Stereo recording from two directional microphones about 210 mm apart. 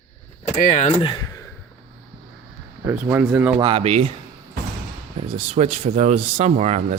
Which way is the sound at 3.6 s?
25° right (ahead or behind).